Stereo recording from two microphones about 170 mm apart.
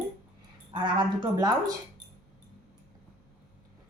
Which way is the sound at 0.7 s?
25° right (ahead or behind).